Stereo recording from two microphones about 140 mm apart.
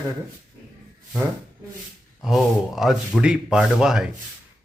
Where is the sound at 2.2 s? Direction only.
Centre (ahead or behind).